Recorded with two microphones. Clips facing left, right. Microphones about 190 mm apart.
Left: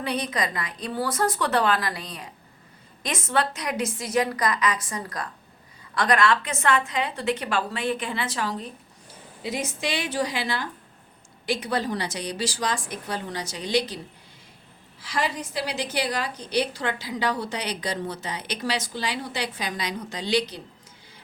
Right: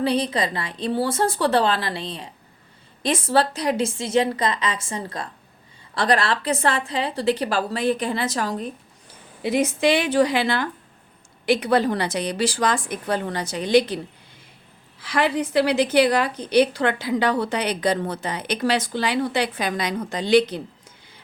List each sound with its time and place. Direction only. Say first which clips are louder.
0.0 s a woman's voice: right 6 dB; 30° right (ahead or behind)
9.4 s a woman's voice: right 9 dB; 60° right (ahead or behind)
15.0 s a woman's voice: right 7 dB; 60° right (ahead or behind)